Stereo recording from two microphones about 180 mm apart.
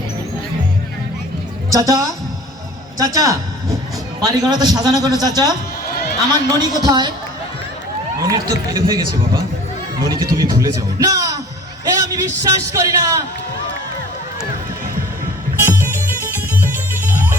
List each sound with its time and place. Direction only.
1.7 s a woman's voice: 15° right (ahead or behind)
8.2 s a man's voice: 25° right (ahead or behind)
15.5 s music: 15° right (ahead or behind)